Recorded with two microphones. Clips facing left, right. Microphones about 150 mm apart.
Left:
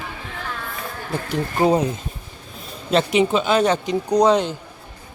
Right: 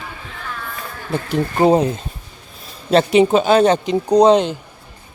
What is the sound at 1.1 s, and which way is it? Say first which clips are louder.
Speech: right 5 dB; 25° right (ahead or behind).